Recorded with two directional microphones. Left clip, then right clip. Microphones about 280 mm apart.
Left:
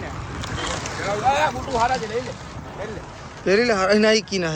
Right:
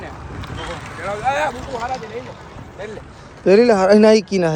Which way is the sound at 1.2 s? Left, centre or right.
Right.